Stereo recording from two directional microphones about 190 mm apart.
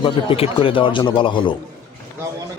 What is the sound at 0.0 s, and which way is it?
A man's voice, 30° left (ahead or behind).